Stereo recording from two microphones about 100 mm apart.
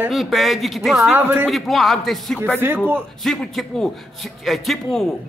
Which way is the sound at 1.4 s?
Centre (ahead or behind).